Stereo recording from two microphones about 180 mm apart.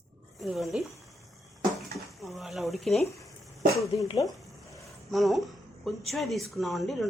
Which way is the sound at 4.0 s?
20° left (ahead or behind).